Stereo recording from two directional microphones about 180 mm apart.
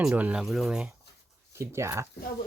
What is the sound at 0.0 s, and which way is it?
Speech, 5° right (ahead or behind).